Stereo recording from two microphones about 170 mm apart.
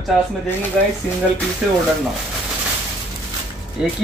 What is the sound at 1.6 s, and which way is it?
Speech, 5° right (ahead or behind).